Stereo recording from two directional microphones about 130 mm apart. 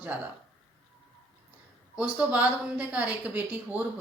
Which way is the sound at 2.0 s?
10° right (ahead or behind).